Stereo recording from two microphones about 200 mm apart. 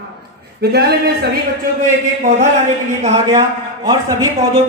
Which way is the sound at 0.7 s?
55° right (ahead or behind).